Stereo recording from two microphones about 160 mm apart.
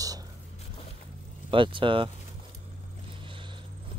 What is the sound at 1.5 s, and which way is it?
Speech, 30° right (ahead or behind).